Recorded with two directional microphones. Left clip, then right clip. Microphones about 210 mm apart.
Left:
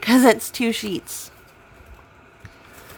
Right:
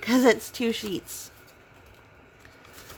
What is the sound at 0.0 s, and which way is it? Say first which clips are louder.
A woman's voice: left 5 dB; 20° left (ahead or behind).